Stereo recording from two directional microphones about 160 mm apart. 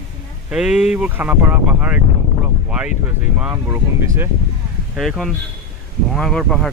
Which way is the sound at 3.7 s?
15° right (ahead or behind).